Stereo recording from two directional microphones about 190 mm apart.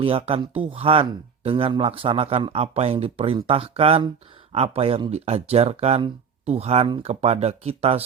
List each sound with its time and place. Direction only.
0.0 s speech: 30° right (ahead or behind)